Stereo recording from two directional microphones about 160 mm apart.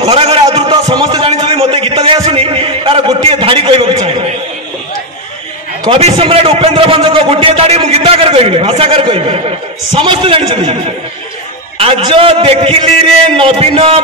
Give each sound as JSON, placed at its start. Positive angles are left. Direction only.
{"t": 0.1, "sound": "a man's voice", "side_deg": -35}
{"t": 5.9, "sound": "a man's voice", "side_deg": -40}
{"t": 11.8, "sound": "a man's voice", "side_deg": -35}